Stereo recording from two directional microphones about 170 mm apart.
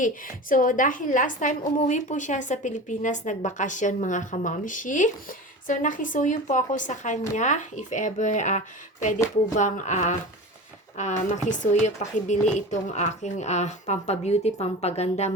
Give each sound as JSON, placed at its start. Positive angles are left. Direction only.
{"t": 0.0, "sound": "a woman's voice", "side_deg": 50}